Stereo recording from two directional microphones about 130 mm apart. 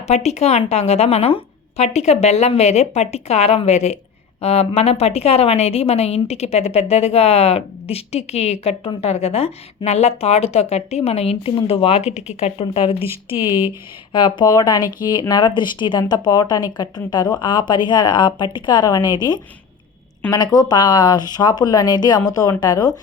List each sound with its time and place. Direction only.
0.1 s a woman's voice: 60° left (ahead or behind); by 23.0 s 30° left (ahead or behind)